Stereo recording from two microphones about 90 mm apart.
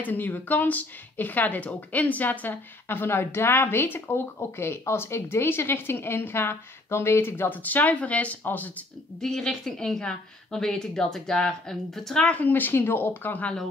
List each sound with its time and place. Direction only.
0.0 s speech: 20° left (ahead or behind)
9.2 s a woman's voice: 5° left (ahead or behind)